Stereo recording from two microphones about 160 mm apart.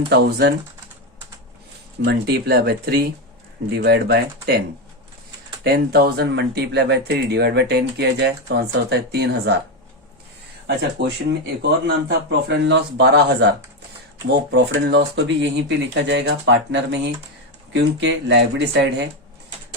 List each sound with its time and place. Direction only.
0.1 s speech: 90° right
2.0 s speech: 85° right
3.8 s speech: 90° right
5.6 s speech: 75° right (ahead or behind); by 9.6 s 90° right
11.0 s speech: 90° right
14.5 s speech: 90° right